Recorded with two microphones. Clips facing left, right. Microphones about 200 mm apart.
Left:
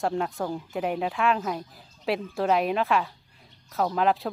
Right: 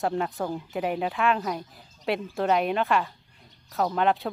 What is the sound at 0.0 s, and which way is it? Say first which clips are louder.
Speech: even; centre (ahead or behind).